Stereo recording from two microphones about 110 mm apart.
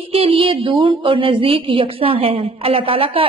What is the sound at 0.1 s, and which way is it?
A woman's voice, 55° right (ahead or behind).